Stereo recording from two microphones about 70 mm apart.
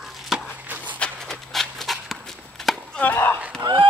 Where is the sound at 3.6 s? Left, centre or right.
Right.